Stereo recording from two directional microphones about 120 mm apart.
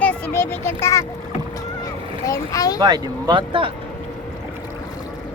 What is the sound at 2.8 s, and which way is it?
Speech, 35° right (ahead or behind).